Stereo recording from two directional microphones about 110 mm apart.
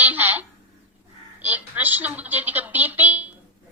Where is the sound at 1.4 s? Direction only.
15° right (ahead or behind).